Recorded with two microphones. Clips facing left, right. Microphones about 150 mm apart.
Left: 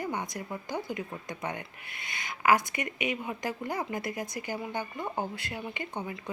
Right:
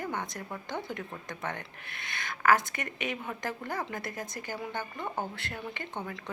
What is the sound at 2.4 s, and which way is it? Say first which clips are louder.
Speech: left 1 dB; 15° left (ahead or behind).